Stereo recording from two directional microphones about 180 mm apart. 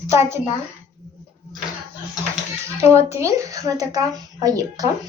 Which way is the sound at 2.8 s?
15° right (ahead or behind).